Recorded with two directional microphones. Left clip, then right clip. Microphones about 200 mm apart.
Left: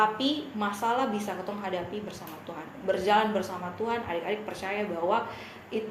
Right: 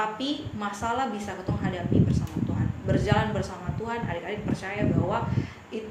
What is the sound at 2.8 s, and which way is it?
A woman's voice, 20° left (ahead or behind).